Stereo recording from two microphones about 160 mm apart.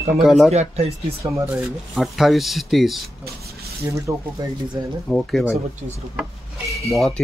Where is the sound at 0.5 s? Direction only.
45° right (ahead or behind).